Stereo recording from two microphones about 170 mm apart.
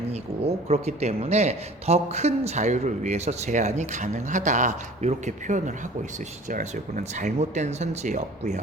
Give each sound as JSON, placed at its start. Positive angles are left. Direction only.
{"t": 0.1, "sound": "a man's voice", "side_deg": -40}